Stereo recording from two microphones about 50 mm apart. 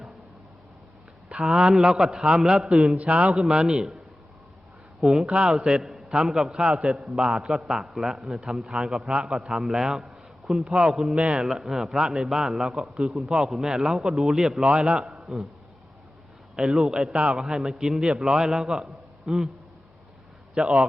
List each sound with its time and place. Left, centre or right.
1.3 s a man's voice: centre
2.9 s a man's voice: right
3.3 s a man's voice: centre
5.2 s a man's voice: centre
12.7 s a man's voice: centre
16.6 s a man's voice: centre
20.6 s a man's voice: centre